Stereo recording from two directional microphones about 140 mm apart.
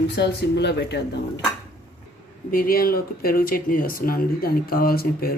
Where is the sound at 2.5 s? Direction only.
90° left.